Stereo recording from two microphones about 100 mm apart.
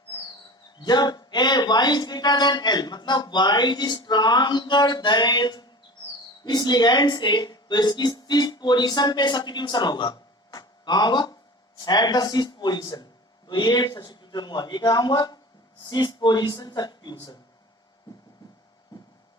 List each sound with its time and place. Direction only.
0.8 s speech: 45° left (ahead or behind)